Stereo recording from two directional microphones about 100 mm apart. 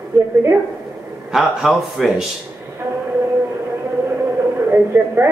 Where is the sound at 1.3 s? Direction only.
5° right (ahead or behind).